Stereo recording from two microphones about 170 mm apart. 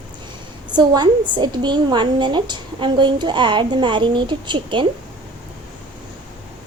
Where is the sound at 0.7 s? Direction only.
25° right (ahead or behind).